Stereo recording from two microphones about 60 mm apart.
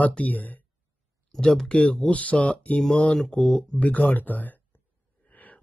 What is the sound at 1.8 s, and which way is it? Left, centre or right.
Speech, left.